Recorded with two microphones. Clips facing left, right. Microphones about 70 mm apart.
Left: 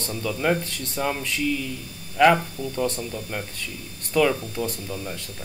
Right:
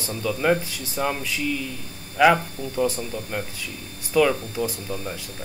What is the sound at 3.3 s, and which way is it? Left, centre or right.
Speech, centre.